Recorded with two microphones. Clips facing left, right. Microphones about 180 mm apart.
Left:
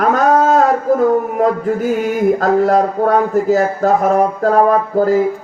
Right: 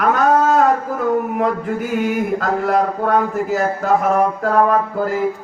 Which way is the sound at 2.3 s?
40° left (ahead or behind).